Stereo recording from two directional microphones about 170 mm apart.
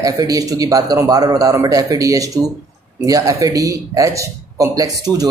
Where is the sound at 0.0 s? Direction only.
20° right (ahead or behind).